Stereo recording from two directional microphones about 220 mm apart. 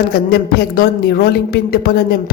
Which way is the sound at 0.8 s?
45° left (ahead or behind).